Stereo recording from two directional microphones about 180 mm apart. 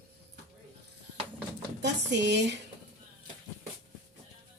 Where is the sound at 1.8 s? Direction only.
75° right (ahead or behind).